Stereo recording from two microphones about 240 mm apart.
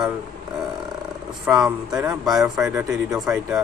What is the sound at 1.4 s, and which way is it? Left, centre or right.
Speech, centre.